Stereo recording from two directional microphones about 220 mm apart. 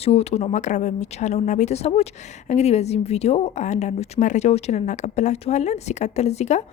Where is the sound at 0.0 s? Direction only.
30° left (ahead or behind).